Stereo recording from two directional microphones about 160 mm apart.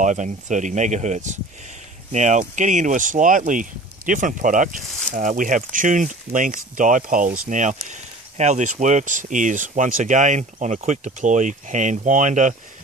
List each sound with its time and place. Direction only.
0.0 s speech: 50° right (ahead or behind)